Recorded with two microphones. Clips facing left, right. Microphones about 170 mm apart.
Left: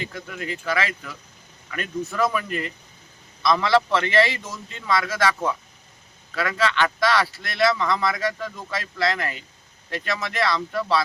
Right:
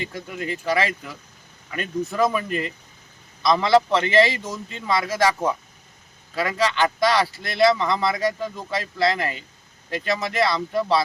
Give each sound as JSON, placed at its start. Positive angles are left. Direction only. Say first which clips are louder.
{"t": 0.1, "sound": "speech", "louder": "right 2 dB", "side_deg": -25}